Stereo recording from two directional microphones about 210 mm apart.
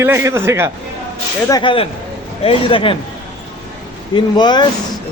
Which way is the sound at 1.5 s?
20° left (ahead or behind).